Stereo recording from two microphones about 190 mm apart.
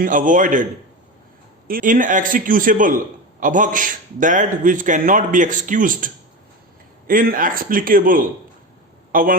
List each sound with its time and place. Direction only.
0.0 s a man's voice: 45° right (ahead or behind)
1.6 s a man's voice: 45° right (ahead or behind)
7.1 s a man's voice: 50° right (ahead or behind)